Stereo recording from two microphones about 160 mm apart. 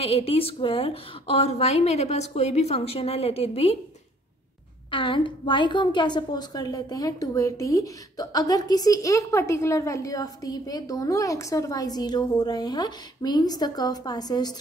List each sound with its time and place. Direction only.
0.0 s a woman's voice: 35° left (ahead or behind)
4.9 s a woman's voice: 30° left (ahead or behind)